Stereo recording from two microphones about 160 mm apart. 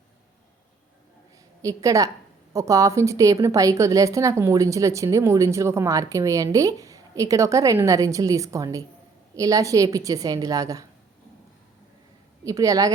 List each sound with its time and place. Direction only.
1.6 s a woman's voice: 20° right (ahead or behind)
12.5 s a woman's voice: 20° right (ahead or behind)